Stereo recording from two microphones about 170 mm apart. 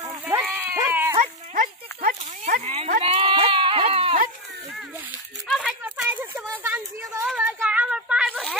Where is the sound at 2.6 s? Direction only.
40° right (ahead or behind).